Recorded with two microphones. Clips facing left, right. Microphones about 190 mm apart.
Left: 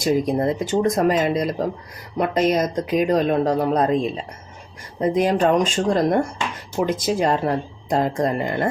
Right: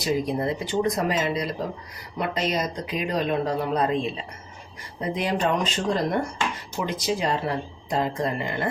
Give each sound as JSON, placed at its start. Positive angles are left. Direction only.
{"t": 0.0, "sound": "speech", "side_deg": 45}